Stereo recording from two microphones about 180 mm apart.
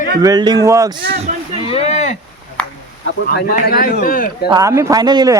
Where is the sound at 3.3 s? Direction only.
60° left (ahead or behind).